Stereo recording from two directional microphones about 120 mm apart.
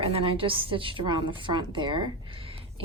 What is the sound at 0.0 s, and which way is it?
A woman's voice, 50° right (ahead or behind).